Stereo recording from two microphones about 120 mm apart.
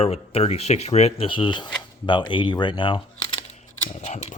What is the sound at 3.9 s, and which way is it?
Scissors, 80° left.